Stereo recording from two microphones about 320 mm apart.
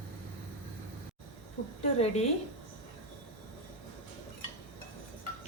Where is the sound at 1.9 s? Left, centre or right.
Centre.